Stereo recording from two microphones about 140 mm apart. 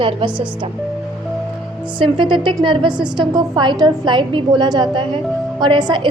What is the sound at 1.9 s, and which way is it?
A woman's voice, 35° right (ahead or behind).